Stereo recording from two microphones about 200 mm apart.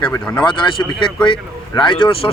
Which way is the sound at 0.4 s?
25° left (ahead or behind).